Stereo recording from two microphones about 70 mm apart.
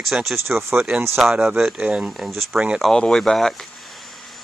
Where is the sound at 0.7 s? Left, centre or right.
Centre.